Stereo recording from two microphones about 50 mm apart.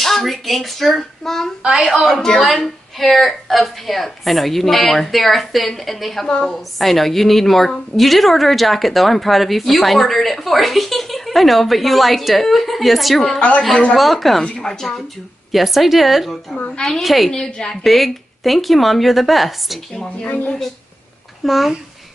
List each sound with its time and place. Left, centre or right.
0.0 s hands: centre
1.6 s speech: centre
2.0 s a woman's voice: centre
6.2 s a woman's voice: centre
6.8 s a woman's voice: centre
14.4 s a woman's voice: centre
15.5 s a woman's voice: centre
16.5 s a woman's voice: left
17.0 s a woman's voice: centre
17.3 s a woman's voice: centre
17.8 s a woman's voice: centre
19.9 s a woman's voice: centre
20.2 s speech: left
21.5 s a woman's voice: centre